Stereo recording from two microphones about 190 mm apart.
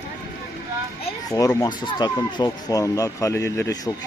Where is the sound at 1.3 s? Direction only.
20° left (ahead or behind).